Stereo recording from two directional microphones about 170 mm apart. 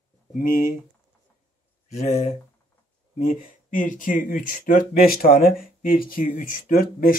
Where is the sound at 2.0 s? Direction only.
40° left (ahead or behind).